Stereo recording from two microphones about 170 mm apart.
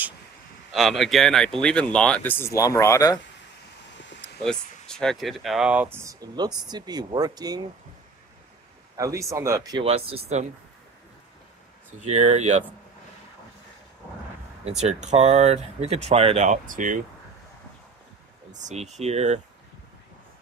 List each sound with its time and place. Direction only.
0.7 s speech: centre (ahead or behind); by 3.2 s 20° left (ahead or behind)
4.0 s a sound: 90° left
4.4 s speech: 5° left (ahead or behind); by 7.6 s 25° right (ahead or behind)
8.9 s speech: 20° right (ahead or behind)
9.8 s speech: 35° right (ahead or behind)
12.0 s speech: 40° right (ahead or behind)
14.8 s speech: 40° right (ahead or behind)
18.5 s speech: 45° right (ahead or behind)